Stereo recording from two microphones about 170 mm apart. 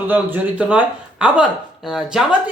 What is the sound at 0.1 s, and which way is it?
Speech, 10° right (ahead or behind).